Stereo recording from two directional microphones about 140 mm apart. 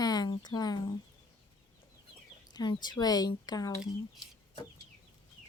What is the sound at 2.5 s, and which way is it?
Speech, 30° left (ahead or behind).